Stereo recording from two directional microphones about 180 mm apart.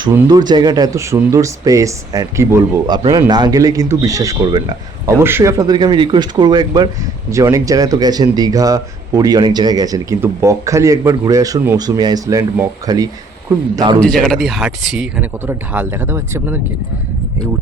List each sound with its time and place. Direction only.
0.1 s speech: 20° right (ahead or behind)
14.0 s speech: 5° left (ahead or behind); by 16.6 s 15° right (ahead or behind)